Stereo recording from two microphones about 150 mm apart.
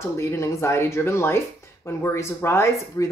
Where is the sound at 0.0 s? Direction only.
15° left (ahead or behind).